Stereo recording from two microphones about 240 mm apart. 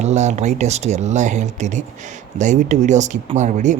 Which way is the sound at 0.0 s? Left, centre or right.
Right.